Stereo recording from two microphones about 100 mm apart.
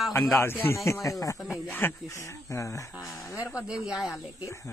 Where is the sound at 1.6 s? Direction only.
20° left (ahead or behind).